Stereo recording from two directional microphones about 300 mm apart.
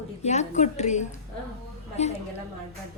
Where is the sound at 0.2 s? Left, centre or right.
Left.